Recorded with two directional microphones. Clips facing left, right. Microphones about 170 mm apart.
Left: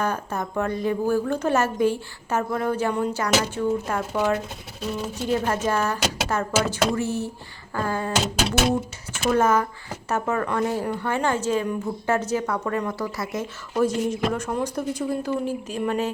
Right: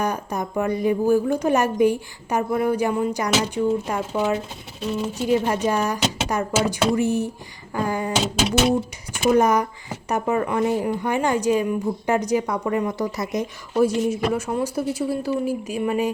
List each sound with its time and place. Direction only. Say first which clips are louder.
0.0 s a woman's voice: right 2 dB; 15° right (ahead or behind)
9.3 s a woman's voice: right 2 dB; 15° right (ahead or behind)